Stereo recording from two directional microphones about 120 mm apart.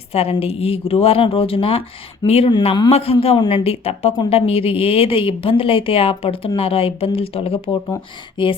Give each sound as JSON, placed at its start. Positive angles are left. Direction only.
{"t": 0.1, "sound": "a woman's voice", "side_deg": 55}